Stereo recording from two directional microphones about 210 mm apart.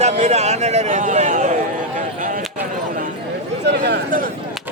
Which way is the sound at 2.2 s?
40° right (ahead or behind).